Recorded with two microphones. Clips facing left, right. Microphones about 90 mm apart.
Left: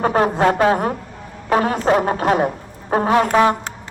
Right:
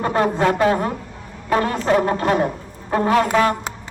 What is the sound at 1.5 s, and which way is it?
Speech, 10° left (ahead or behind).